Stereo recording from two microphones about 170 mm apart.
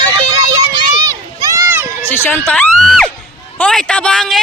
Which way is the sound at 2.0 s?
10° left (ahead or behind).